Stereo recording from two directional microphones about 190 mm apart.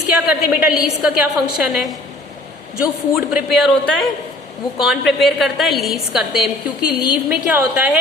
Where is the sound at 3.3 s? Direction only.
Centre (ahead or behind).